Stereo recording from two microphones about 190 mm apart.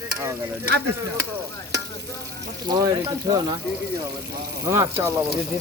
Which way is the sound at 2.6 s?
20° right (ahead or behind).